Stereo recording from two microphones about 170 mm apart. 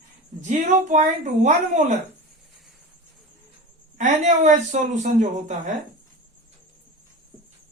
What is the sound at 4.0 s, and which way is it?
Speech, 45° right (ahead or behind).